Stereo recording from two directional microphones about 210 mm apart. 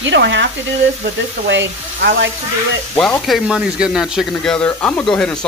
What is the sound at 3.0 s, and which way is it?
Speech, centre (ahead or behind).